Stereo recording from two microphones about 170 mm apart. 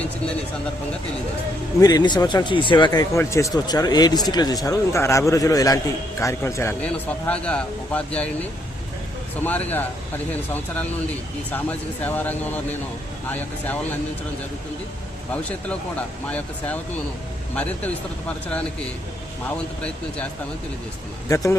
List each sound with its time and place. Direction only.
1.8 s speech: 25° left (ahead or behind); by 8.3 s 5° left (ahead or behind)
9.4 s speech: 10° left (ahead or behind)
11.5 s speech: 10° left (ahead or behind)
15.3 s speech: 10° left (ahead or behind)
21.2 s speech: 20° left (ahead or behind)